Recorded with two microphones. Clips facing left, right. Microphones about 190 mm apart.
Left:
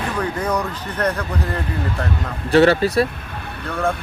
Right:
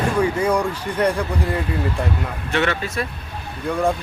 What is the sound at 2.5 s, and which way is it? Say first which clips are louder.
Speech: left 9 dB; 35° left (ahead or behind).